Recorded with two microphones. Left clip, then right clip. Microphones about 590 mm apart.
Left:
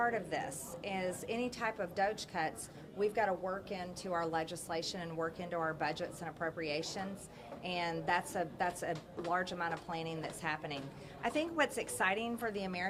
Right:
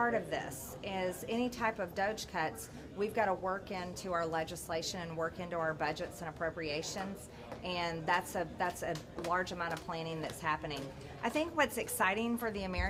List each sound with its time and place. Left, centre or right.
0.0 s a woman's voice: right